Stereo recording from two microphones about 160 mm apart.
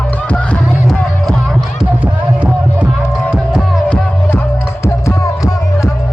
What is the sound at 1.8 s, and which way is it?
Music, 10° right (ahead or behind).